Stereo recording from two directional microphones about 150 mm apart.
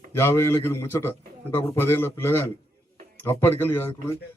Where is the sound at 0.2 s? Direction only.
15° left (ahead or behind).